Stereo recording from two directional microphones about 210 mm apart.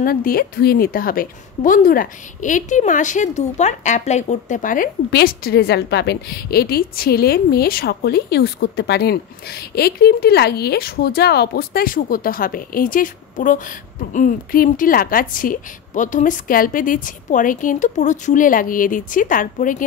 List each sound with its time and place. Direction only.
0.0 s a woman's voice: 45° left (ahead or behind)